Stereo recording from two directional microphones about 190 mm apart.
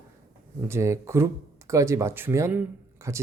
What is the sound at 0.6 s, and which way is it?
Speech, 15° right (ahead or behind).